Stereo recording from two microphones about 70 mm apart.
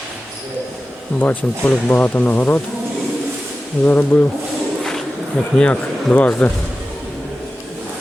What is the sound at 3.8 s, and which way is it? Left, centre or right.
Speech, left.